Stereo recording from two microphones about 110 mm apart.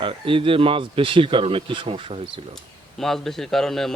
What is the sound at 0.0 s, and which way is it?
Speech, 55° right (ahead or behind).